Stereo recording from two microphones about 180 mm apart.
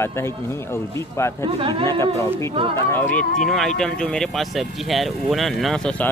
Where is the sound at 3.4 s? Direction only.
Centre (ahead or behind).